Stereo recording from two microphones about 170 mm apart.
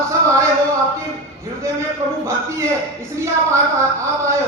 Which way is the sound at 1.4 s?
15° right (ahead or behind).